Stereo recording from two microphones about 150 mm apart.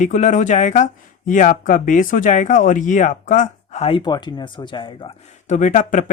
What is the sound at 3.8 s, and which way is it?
Speech, 30° left (ahead or behind).